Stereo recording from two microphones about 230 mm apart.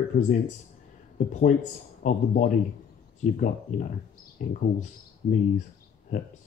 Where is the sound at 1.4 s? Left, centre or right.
Left.